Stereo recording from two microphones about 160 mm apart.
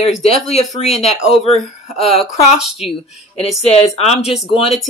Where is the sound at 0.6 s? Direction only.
40° left (ahead or behind).